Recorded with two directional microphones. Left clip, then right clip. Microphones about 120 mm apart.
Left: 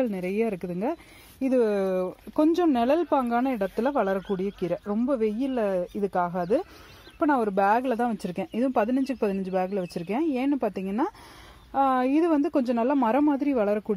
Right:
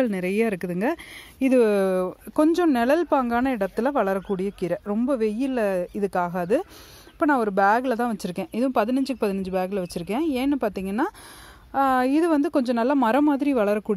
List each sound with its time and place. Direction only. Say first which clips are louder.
0.0 s speech: right 3 dB; 35° right (ahead or behind)
2.3 s a woman's voice: right 2 dB; 15° right (ahead or behind)